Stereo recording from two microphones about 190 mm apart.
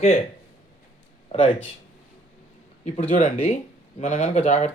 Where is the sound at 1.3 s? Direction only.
25° left (ahead or behind).